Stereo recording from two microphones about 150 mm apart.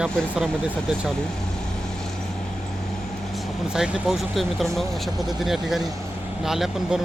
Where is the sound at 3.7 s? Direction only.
5° right (ahead or behind).